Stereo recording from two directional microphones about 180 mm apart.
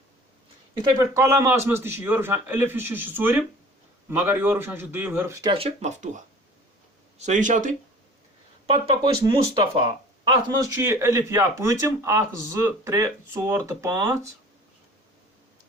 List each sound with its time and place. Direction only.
0.7 s speech: 20° right (ahead or behind); by 7.7 s 45° right (ahead or behind)
8.6 s speech: 30° right (ahead or behind)
10.2 s speech: 20° right (ahead or behind)